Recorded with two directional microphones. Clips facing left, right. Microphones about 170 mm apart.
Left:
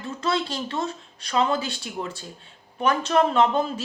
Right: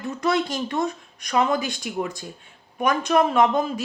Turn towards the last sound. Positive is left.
turn(degrees=-15)  # may be behind; listen again after turning